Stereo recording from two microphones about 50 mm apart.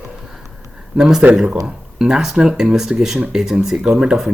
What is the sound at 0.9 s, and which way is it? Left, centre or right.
Speech, centre.